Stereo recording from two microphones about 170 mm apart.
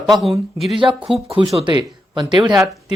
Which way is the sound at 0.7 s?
30° right (ahead or behind).